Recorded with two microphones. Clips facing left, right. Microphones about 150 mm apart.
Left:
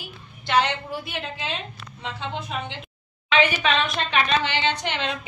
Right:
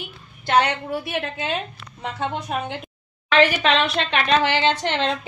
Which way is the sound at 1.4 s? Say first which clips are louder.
Right 5 dB; 50° right (ahead or behind).